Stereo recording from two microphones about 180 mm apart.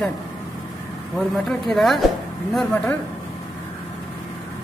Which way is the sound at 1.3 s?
Centre (ahead or behind).